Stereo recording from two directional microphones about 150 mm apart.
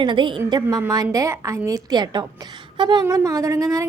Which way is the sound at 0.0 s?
30° right (ahead or behind).